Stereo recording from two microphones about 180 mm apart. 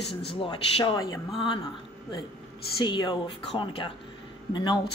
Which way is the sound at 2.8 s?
25° left (ahead or behind).